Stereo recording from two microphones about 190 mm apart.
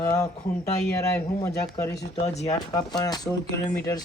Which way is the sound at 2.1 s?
25° left (ahead or behind).